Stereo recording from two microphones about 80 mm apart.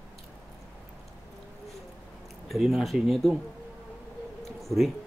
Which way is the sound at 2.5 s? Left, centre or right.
Centre.